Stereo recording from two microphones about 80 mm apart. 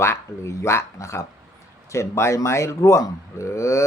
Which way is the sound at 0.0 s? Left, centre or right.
Left.